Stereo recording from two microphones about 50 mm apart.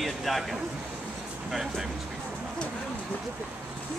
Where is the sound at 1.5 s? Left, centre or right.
Centre.